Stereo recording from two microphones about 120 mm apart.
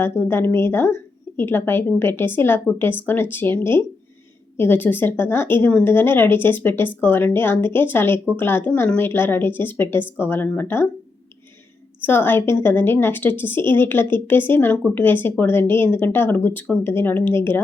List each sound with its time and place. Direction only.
0.0 s a woman's voice: 20° left (ahead or behind)
12.0 s a woman's voice: 20° left (ahead or behind)